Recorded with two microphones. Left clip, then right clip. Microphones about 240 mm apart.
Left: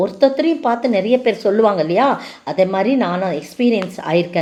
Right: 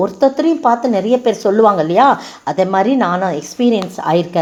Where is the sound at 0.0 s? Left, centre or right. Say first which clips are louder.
Right 1 dB; right.